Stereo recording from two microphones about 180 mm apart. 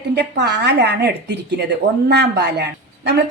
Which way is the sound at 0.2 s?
70° right (ahead or behind).